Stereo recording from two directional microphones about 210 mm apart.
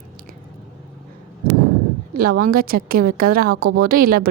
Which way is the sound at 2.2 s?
45° right (ahead or behind).